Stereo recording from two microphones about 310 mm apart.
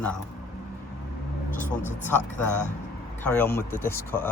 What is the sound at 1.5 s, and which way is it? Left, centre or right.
Speech, left.